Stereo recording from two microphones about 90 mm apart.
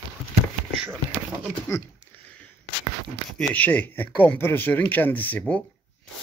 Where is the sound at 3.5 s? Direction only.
20° left (ahead or behind).